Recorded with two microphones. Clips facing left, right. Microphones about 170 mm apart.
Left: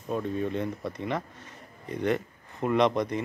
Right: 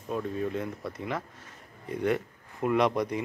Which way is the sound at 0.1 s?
Centre (ahead or behind).